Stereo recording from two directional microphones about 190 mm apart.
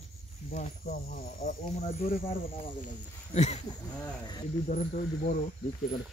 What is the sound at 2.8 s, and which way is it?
Speech, 35° left (ahead or behind).